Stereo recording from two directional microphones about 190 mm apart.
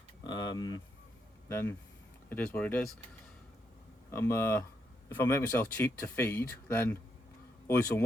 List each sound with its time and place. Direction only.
0.3 s speech: 20° left (ahead or behind)
4.1 s speech: 15° left (ahead or behind)